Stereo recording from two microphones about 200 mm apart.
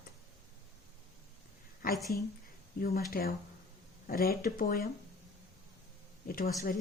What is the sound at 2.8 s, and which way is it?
Speech, 50° left (ahead or behind).